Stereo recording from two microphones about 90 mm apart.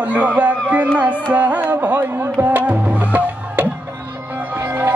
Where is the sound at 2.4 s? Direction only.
20° right (ahead or behind).